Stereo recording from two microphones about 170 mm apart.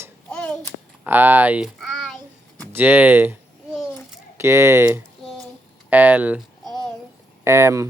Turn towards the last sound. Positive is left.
turn(degrees=-15)  # may be behind; listen again after turning